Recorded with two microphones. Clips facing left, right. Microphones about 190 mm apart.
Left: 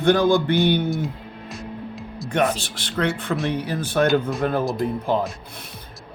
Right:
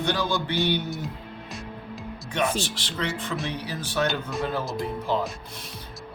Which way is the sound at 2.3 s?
55° left (ahead or behind).